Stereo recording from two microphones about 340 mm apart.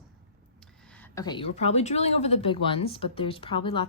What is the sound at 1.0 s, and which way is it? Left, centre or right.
Speech, centre.